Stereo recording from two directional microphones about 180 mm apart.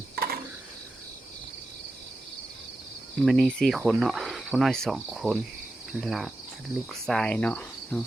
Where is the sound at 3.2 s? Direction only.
Centre (ahead or behind).